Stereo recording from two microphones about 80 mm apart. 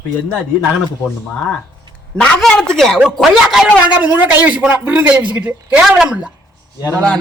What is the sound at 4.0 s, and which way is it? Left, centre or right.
A man's voice, right.